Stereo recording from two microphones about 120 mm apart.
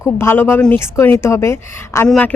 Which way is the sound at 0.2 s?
20° left (ahead or behind).